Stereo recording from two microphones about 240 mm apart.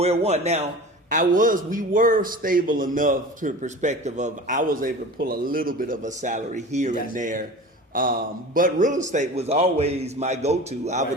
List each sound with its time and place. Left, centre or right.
0.0 s a man's voice: right